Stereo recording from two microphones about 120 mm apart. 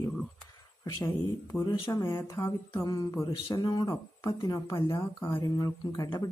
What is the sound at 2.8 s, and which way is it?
Speech, 35° left (ahead or behind).